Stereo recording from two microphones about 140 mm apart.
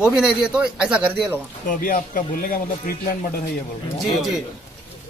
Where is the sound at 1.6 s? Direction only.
75° left (ahead or behind).